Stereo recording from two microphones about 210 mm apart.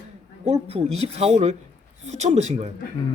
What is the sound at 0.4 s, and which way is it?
Speech, 30° right (ahead or behind).